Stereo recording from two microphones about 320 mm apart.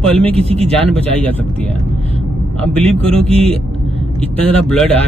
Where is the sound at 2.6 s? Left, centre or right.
Centre.